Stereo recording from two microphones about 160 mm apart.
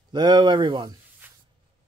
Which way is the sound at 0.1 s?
25° right (ahead or behind).